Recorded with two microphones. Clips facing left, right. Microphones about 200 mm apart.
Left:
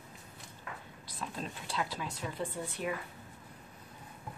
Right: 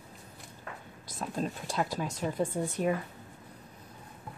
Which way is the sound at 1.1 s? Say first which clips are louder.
Right 7 dB; 45° right (ahead or behind).